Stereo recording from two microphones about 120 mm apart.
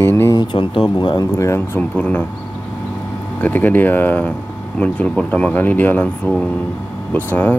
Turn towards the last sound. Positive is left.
turn(degrees=15)  # may be behind; listen again after turning